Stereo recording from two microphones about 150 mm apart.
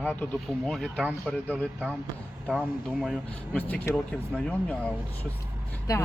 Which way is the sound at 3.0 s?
Centre (ahead or behind).